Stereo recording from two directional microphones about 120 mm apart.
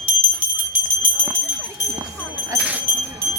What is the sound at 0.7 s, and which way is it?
Music, 15° right (ahead or behind).